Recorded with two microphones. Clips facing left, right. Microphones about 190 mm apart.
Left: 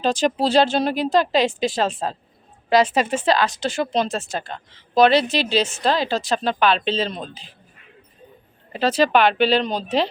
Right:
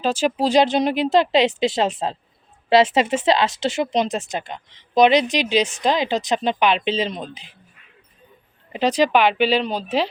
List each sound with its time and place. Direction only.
0.0 s speech: 5° right (ahead or behind)
8.7 s speech: 15° right (ahead or behind)